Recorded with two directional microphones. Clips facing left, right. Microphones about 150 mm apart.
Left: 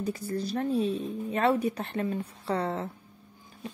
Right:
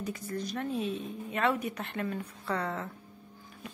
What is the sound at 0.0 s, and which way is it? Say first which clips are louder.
Speech: left 4 dB; 30° left (ahead or behind).